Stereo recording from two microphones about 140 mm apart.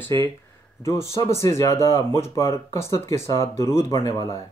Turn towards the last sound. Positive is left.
turn(degrees=25)  # may be behind; listen again after turning